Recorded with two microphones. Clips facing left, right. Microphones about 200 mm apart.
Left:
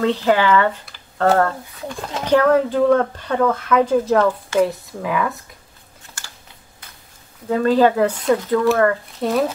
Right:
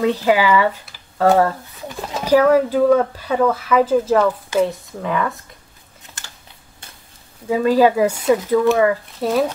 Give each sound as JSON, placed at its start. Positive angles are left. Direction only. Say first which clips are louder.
{"t": 0.0, "sound": "speech", "louder": "right 1 dB", "side_deg": -10}
{"t": 6.2, "sound": "typing", "louder": "even", "side_deg": -20}
{"t": 7.4, "sound": "speech", "louder": "right 1 dB", "side_deg": -10}